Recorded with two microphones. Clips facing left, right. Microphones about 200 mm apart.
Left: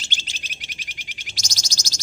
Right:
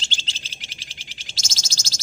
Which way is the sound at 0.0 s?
15° left (ahead or behind).